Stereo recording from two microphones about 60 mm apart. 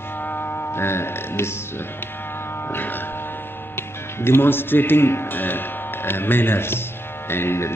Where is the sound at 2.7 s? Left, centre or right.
Left.